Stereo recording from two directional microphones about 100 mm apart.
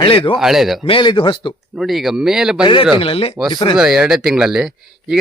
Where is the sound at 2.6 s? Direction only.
55° left (ahead or behind).